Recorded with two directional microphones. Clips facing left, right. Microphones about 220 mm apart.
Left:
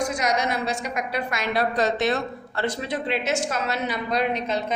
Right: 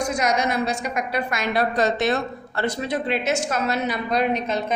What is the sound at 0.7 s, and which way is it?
A woman's voice, 45° right (ahead or behind).